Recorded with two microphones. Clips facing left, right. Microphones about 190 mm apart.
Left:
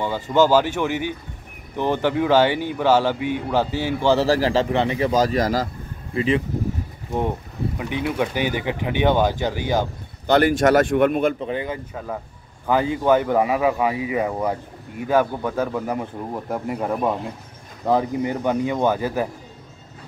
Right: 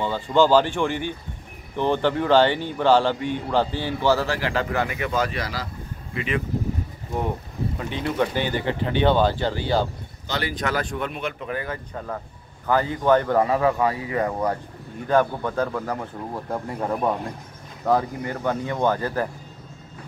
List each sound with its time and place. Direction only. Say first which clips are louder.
0.0 s speech: left 1 dB; 10° left (ahead or behind)
4.3 s a man's voice: left 6 dB; 35° left (ahead or behind)
6.1 s speech: left 6 dB; 30° left (ahead or behind)
7.2 s speech: left 3 dB; 15° left (ahead or behind)
10.2 s speech: left 11 dB; 55° left (ahead or behind)
11.3 s speech: left 4 dB; 25° left (ahead or behind)